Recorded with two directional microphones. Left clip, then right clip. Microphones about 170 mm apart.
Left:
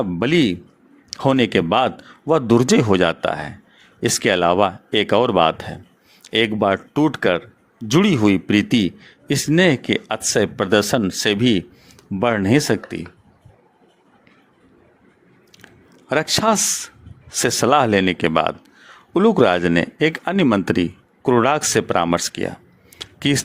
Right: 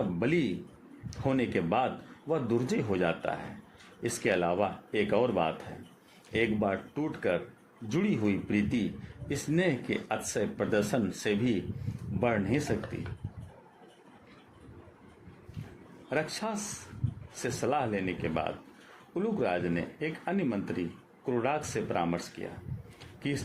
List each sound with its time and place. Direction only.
0.2 s a man's voice: 60° left (ahead or behind)
6.3 s a man's voice: 60° left (ahead or behind)
7.9 s a man's voice: 70° left (ahead or behind)
16.0 s speech: 70° left (ahead or behind)